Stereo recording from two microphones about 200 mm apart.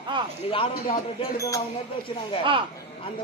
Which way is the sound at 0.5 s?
25° left (ahead or behind).